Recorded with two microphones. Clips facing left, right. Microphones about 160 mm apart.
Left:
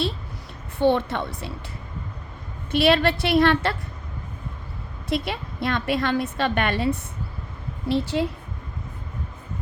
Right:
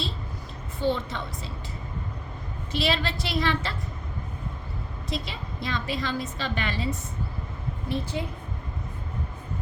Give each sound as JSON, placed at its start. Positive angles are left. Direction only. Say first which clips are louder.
{"t": 0.8, "sound": "a woman's voice", "louder": "left 7 dB", "side_deg": 65}
{"t": 2.7, "sound": "a woman's voice", "louder": "left 8 dB", "side_deg": 60}
{"t": 5.0, "sound": "a woman's voice", "louder": "left 8 dB", "side_deg": 60}
{"t": 7.9, "sound": "a woman's voice", "louder": "left 8 dB", "side_deg": 80}